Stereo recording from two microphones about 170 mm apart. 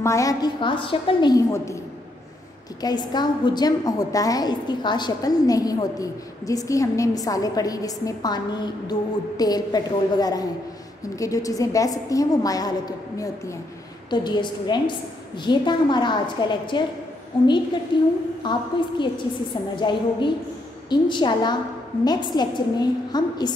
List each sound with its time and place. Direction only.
0.0 s a woman's voice: 20° left (ahead or behind)
2.8 s a woman's voice: 25° left (ahead or behind)
9.4 s a woman's voice: 20° left (ahead or behind)
17.9 s a woman's voice: 30° left (ahead or behind)